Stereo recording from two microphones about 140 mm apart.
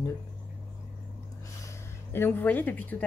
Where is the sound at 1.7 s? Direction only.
15° left (ahead or behind).